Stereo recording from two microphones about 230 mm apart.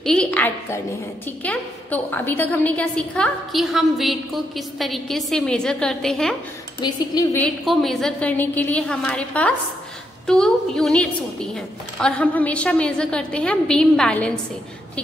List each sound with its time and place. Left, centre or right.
0.0 s a sound: centre
1.2 s a woman's voice: centre
6.8 s a woman's voice: centre
7.3 s a woman's voice: centre